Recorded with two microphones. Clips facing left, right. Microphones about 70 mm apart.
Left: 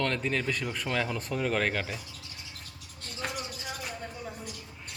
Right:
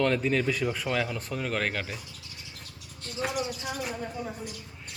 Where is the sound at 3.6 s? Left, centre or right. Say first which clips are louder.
Right 5 dB; right.